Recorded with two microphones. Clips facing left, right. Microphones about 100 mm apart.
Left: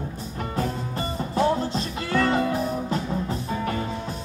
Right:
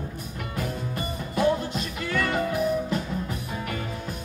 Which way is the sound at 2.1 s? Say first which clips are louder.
Left 4 dB; 35° left (ahead or behind).